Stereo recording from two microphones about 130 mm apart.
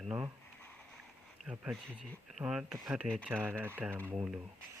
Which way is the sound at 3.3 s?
15° right (ahead or behind).